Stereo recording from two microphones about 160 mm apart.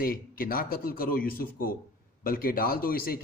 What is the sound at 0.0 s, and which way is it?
A man's voice, 65° left (ahead or behind).